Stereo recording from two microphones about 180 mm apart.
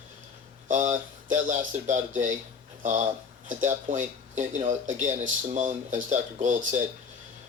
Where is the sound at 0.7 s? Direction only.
45° right (ahead or behind).